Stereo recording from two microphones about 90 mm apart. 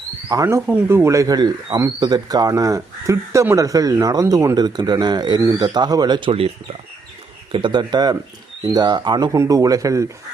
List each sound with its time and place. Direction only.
0.3 s speech: 45° right (ahead or behind)
0.7 s speech: 25° right (ahead or behind); by 6.5 s 80° right
7.5 s speech: 65° right (ahead or behind); by 10.1 s 35° right (ahead or behind)